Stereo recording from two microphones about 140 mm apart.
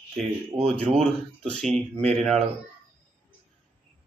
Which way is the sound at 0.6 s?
10° left (ahead or behind).